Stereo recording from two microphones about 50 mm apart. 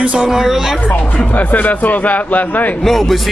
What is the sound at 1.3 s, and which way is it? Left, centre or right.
A man's voice, left.